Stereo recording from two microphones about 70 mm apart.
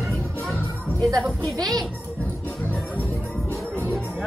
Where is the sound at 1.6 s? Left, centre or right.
Right.